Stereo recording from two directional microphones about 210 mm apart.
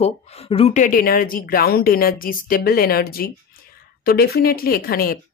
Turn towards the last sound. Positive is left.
turn(degrees=45)  # may be behind; listen again after turning